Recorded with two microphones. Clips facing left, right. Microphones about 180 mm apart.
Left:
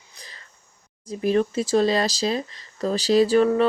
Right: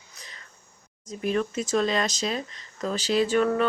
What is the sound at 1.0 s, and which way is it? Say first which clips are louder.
Speech: left 5 dB; 35° left (ahead or behind).